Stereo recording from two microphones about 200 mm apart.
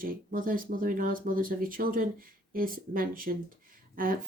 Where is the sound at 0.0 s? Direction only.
45° right (ahead or behind).